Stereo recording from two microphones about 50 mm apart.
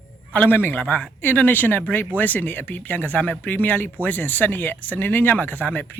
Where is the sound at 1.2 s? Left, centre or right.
Left.